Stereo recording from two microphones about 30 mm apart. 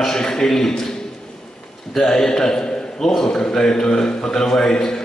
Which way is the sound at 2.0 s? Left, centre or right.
Centre.